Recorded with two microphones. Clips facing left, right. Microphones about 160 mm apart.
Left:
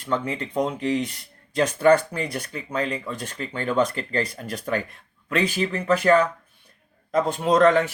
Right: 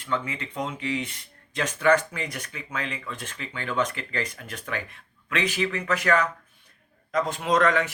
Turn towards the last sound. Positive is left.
turn(degrees=30)  # may be behind; listen again after turning